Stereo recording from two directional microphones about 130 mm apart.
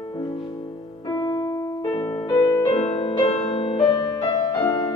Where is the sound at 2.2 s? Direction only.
30° left (ahead or behind).